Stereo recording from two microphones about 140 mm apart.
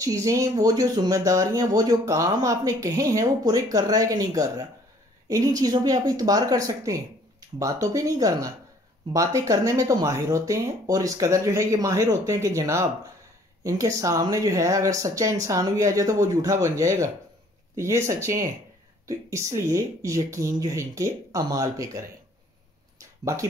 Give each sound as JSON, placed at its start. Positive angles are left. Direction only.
{"t": 0.0, "sound": "speech", "side_deg": -25}